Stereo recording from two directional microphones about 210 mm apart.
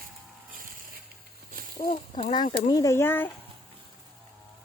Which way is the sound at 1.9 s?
20° left (ahead or behind).